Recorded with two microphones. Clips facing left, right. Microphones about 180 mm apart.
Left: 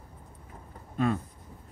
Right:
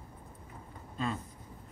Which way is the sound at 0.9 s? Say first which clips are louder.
Left 8 dB; 60° left (ahead or behind).